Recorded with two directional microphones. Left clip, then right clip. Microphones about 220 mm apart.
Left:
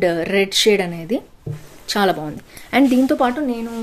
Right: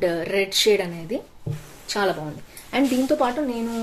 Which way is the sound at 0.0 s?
40° left (ahead or behind).